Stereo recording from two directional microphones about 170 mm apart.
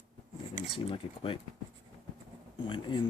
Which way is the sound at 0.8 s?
30° left (ahead or behind).